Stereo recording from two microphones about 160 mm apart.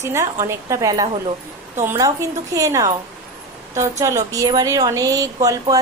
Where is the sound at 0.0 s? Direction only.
20° right (ahead or behind).